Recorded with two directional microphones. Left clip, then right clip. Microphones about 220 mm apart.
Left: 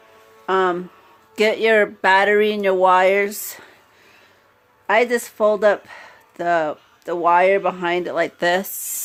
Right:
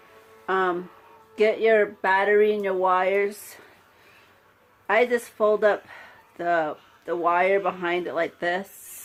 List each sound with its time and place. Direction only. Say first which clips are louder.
0.4 s music: left 5 dB; 40° left (ahead or behind)
1.4 s speech: left 4 dB; 45° left (ahead or behind)
4.9 s speech: left 4 dB; 40° left (ahead or behind)